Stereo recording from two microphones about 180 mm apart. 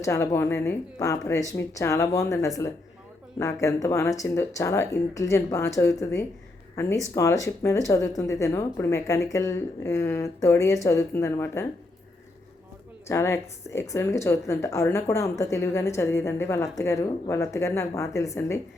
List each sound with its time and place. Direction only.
0.0 s a woman's voice: 15° left (ahead or behind)
13.1 s a woman's voice: 15° left (ahead or behind)